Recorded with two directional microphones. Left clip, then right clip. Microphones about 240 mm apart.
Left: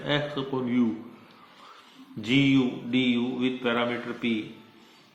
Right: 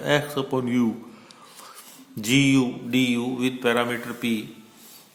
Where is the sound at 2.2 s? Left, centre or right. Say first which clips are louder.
Right 3 dB; right.